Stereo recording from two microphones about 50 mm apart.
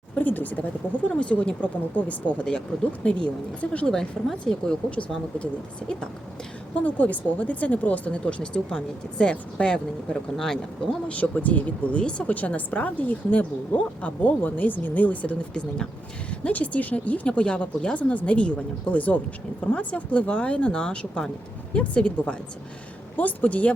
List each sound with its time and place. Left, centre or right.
0.2 s a woman's voice: left
2.4 s speech: centre
4.4 s speech: centre
6.7 s speech: left
10.3 s speech: centre
11.1 s a woman's voice: left